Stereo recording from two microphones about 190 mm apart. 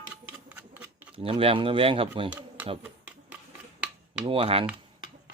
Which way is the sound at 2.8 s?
10° right (ahead or behind).